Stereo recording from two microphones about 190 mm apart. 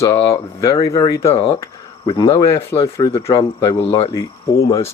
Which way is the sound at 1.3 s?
30° left (ahead or behind).